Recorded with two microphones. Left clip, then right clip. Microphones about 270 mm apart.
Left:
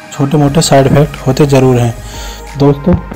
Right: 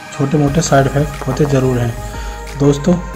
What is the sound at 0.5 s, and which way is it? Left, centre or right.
Speech, centre.